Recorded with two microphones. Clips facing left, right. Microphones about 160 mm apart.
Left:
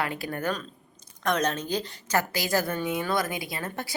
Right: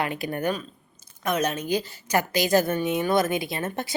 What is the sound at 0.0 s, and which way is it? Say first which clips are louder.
Speech: right 3 dB; 20° right (ahead or behind).